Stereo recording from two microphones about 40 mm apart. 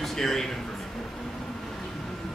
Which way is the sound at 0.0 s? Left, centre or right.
Centre.